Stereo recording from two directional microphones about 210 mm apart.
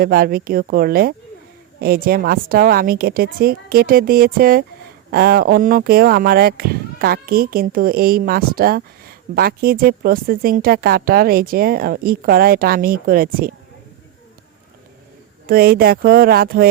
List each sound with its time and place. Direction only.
0.0 s speech: 45° right (ahead or behind)
15.4 s speech: 45° right (ahead or behind)